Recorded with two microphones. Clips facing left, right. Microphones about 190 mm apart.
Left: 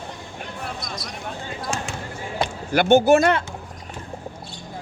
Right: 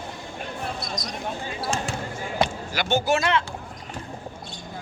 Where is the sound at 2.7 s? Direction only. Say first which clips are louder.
Left 9 dB; 50° left (ahead or behind).